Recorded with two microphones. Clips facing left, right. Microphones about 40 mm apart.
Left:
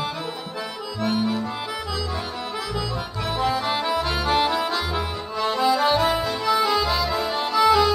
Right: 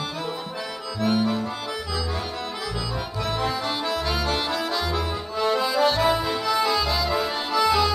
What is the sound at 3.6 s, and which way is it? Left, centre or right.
Accordion, centre.